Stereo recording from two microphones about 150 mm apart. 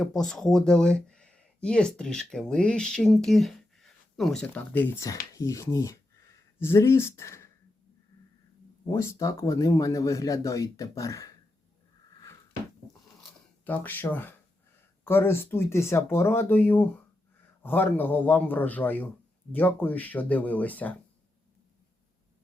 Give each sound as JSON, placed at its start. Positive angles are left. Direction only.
{"t": 0.0, "sound": "speech", "side_deg": 5}
{"t": 8.9, "sound": "speech", "side_deg": 20}
{"t": 13.7, "sound": "speech", "side_deg": 10}